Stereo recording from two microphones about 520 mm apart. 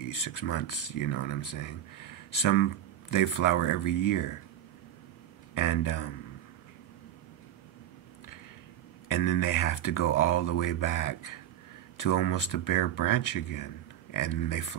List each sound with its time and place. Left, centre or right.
0.1 s speech: left
5.5 s speech: left
9.1 s speech: left